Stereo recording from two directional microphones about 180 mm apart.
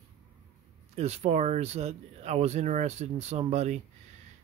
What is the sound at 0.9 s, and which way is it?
A man's voice, 35° right (ahead or behind).